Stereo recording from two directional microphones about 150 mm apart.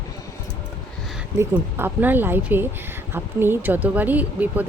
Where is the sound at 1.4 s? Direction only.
15° right (ahead or behind).